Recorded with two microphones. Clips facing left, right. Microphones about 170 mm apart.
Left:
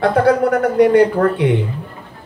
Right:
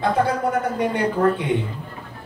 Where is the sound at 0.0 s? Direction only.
80° left.